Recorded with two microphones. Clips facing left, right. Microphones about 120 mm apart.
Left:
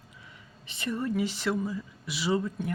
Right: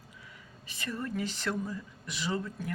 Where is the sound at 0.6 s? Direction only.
25° left (ahead or behind).